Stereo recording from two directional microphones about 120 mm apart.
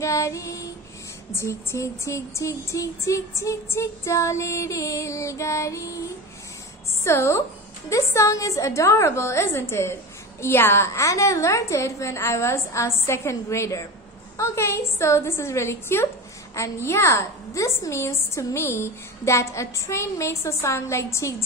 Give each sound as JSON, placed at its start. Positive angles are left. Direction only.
{"t": 0.0, "sound": "a woman's voice", "side_deg": 25}
{"t": 7.1, "sound": "a woman's voice", "side_deg": 20}